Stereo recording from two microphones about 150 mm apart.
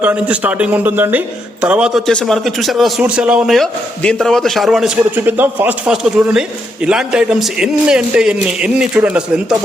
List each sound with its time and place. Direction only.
0.0 s a man's voice: 10° right (ahead or behind)
5.1 s a man's voice: 10° right (ahead or behind)